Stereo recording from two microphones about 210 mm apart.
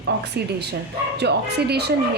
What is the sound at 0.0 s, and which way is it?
Speech, 50° right (ahead or behind).